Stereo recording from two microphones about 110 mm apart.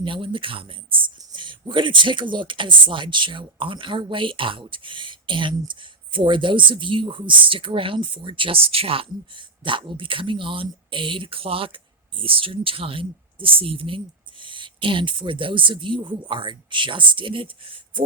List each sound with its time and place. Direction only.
0.0 s speech: 50° right (ahead or behind)